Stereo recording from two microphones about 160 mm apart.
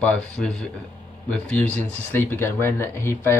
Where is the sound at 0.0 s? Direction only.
5° left (ahead or behind).